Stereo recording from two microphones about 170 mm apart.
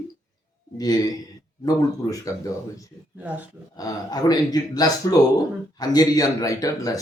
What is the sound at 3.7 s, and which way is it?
A man's voice, 20° left (ahead or behind).